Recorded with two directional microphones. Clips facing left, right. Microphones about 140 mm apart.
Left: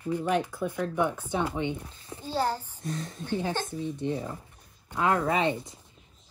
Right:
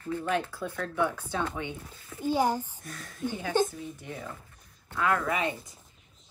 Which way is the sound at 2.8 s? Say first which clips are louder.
Even; 25° left (ahead or behind).